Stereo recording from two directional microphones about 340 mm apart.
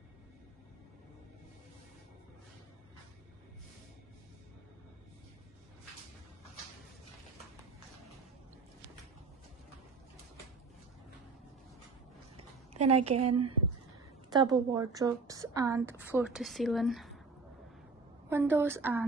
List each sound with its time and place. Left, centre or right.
12.7 s a woman's voice: centre
13.1 s a woman's voice: right
14.3 s a woman's voice: centre
18.3 s a woman's voice: centre